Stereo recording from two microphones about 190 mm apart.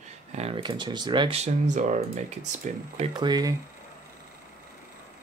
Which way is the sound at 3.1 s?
20° right (ahead or behind).